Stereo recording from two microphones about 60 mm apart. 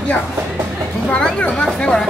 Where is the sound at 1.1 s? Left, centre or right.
Centre.